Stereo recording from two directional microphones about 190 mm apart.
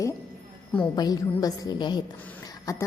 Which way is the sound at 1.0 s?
20° left (ahead or behind).